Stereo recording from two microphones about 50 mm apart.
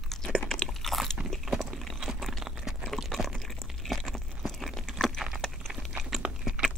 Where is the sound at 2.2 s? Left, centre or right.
Centre.